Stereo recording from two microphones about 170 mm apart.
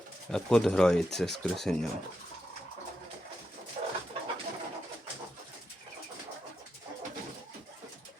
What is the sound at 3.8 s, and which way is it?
Chicken, 40° right (ahead or behind).